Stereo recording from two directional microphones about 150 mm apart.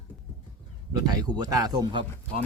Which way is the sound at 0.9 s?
25° right (ahead or behind).